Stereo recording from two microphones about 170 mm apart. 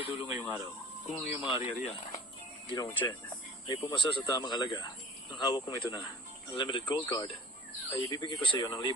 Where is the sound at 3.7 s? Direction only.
30° left (ahead or behind).